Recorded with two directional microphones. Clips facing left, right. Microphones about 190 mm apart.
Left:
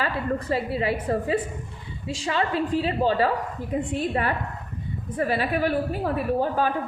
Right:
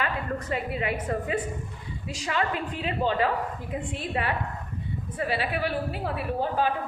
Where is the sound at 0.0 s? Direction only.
35° left (ahead or behind).